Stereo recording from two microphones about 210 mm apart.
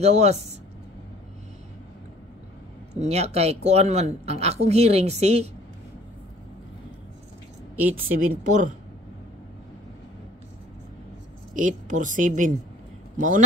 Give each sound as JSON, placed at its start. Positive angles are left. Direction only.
{"t": 0.0, "sound": "speech", "side_deg": -30}
{"t": 3.0, "sound": "speech", "side_deg": -30}
{"t": 7.9, "sound": "speech", "side_deg": -40}
{"t": 11.5, "sound": "speech", "side_deg": -40}